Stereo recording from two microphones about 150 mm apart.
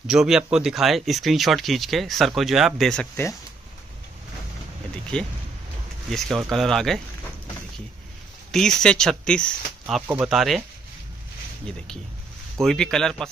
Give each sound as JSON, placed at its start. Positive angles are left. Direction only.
{"t": 0.0, "sound": "speech", "side_deg": -5}
{"t": 5.1, "sound": "speech", "side_deg": 5}
{"t": 8.5, "sound": "speech", "side_deg": 5}
{"t": 12.6, "sound": "speech", "side_deg": 5}